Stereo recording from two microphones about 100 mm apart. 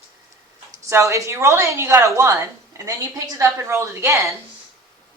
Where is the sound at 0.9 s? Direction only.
30° right (ahead or behind).